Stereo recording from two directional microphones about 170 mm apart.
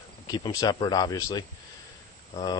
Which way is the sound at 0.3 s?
25° left (ahead or behind).